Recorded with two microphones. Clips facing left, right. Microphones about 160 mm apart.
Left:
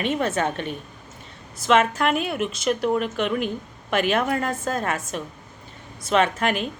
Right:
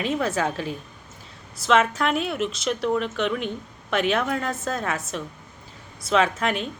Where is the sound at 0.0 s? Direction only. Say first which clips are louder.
Left 1 dB; centre (ahead or behind).